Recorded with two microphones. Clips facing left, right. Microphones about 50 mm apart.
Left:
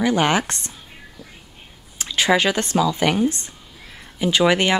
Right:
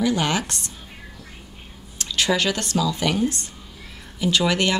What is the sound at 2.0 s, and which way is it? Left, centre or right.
Speech, left.